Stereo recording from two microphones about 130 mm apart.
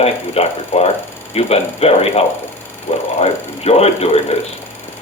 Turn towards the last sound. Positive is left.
turn(degrees=50)  # may be behind; listen again after turning